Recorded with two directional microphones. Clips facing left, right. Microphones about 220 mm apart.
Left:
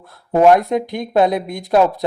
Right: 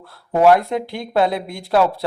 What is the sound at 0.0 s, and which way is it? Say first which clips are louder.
A man's voice: left 2 dB; 20° left (ahead or behind).